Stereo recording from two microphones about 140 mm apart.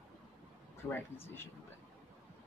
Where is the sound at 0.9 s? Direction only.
15° left (ahead or behind).